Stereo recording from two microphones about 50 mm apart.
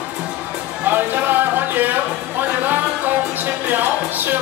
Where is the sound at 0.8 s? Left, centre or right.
Right.